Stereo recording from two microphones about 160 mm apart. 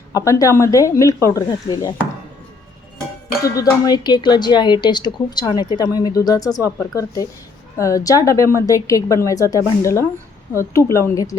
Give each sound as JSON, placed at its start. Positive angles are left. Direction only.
{"t": 0.1, "sound": "a woman's voice", "side_deg": 20}
{"t": 3.5, "sound": "a woman's voice", "side_deg": 25}